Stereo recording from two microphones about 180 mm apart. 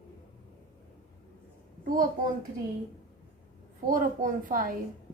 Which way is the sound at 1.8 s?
50° right (ahead or behind).